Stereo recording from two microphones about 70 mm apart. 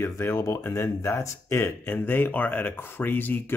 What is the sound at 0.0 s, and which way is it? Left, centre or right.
Speech, left.